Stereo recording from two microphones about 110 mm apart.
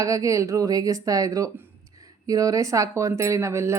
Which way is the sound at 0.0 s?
30° right (ahead or behind).